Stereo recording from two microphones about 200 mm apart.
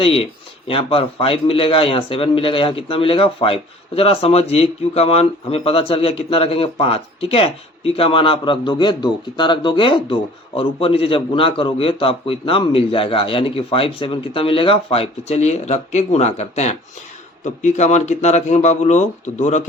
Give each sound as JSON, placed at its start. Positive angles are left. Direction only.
{"t": 0.0, "sound": "a man's voice", "side_deg": 30}